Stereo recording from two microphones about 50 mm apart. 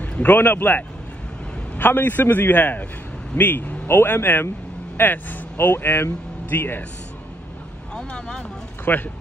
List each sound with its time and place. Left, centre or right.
0.2 s a man's voice: left
3.8 s speech: left
7.9 s speech: centre
8.8 s speech: left